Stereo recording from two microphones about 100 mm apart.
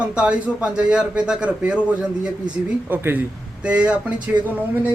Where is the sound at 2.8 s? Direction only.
20° right (ahead or behind).